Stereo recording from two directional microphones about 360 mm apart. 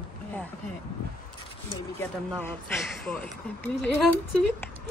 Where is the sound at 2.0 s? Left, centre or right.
Centre.